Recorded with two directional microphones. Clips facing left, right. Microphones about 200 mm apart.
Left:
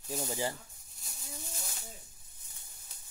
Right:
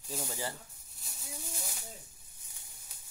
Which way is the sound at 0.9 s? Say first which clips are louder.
Even; centre (ahead or behind).